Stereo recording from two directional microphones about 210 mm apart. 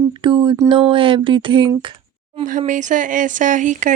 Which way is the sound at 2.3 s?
35° right (ahead or behind).